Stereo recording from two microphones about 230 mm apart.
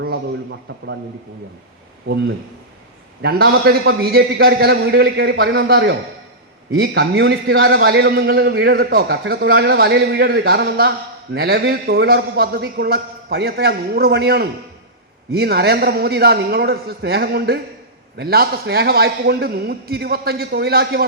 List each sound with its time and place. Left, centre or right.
3.2 s a man's voice: right